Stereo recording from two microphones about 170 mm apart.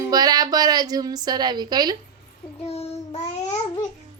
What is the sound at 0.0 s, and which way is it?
A woman's voice, 20° right (ahead or behind).